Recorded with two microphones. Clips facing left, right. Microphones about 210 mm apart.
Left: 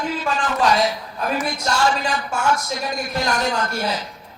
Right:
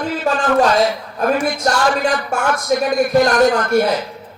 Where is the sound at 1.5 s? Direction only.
55° right (ahead or behind).